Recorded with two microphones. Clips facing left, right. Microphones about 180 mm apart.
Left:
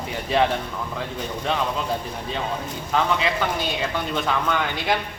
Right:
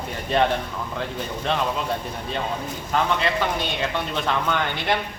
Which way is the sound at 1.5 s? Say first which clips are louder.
Even; centre (ahead or behind).